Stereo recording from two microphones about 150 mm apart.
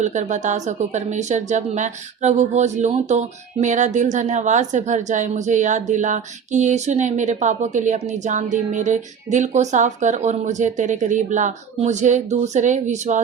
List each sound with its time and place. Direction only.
0.0 s a woman's voice: 55° right (ahead or behind)